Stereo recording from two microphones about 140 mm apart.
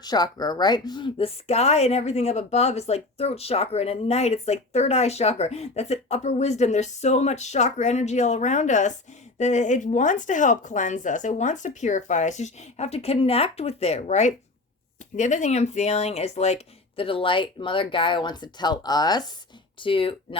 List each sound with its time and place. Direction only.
0.0 s speech: 30° left (ahead or behind)
1.5 s a woman's voice: 50° left (ahead or behind)